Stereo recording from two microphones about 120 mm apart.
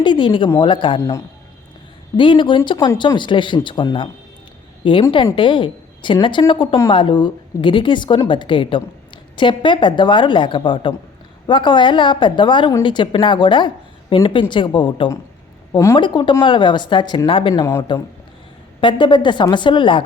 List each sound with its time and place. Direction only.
0.0 s speech: 45° left (ahead or behind)
2.1 s a woman's voice: 45° left (ahead or behind)
15.7 s a woman's voice: 25° left (ahead or behind)
16.0 s a woman's voice: 40° left (ahead or behind)
17.5 s speech: 25° left (ahead or behind)
18.8 s a woman's voice: 40° left (ahead or behind)